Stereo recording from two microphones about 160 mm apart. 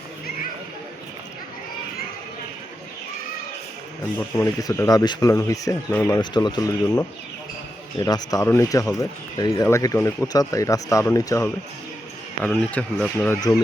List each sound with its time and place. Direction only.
4.2 s speech: 15° left (ahead or behind)
6.3 s speech: 25° left (ahead or behind)
12.4 s speech: 5° left (ahead or behind)